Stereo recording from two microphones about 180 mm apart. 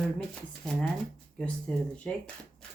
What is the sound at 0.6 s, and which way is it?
Speech, 5° left (ahead or behind).